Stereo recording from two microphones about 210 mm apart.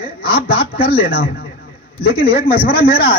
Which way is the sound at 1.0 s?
45° left (ahead or behind).